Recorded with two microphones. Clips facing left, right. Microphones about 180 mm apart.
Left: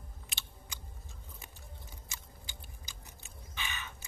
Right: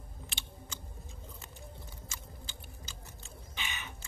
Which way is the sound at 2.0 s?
15° left (ahead or behind).